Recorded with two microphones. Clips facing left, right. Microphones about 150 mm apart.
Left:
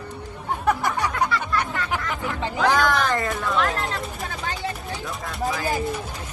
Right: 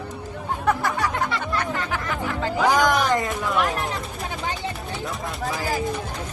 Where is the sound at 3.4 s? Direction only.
15° right (ahead or behind).